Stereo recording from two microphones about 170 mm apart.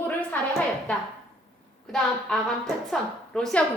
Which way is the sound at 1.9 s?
Centre (ahead or behind).